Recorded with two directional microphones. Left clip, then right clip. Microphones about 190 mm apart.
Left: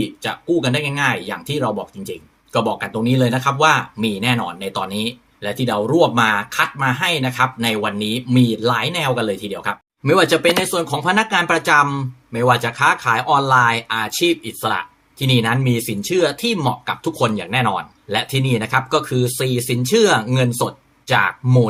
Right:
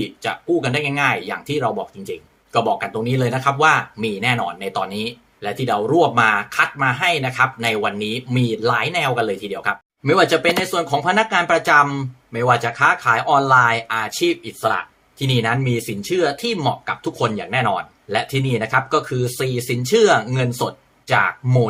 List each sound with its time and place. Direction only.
0.0 s speech: 5° right (ahead or behind)